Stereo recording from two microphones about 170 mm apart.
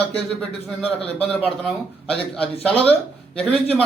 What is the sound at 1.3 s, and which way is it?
A man's voice, 5° left (ahead or behind).